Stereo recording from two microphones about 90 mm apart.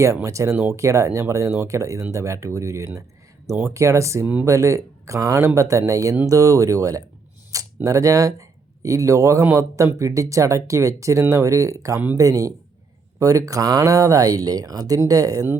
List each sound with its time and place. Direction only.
0.0 s speech: 35° right (ahead or behind)
7.5 s a sound: 40° right (ahead or behind)
7.9 s speech: 40° right (ahead or behind)